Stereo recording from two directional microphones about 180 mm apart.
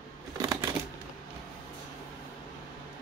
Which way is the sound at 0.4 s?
20° right (ahead or behind).